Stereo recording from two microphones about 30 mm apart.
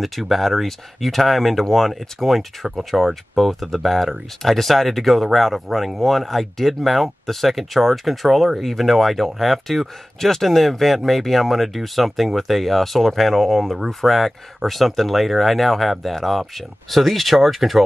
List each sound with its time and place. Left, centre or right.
0.0 s speech: centre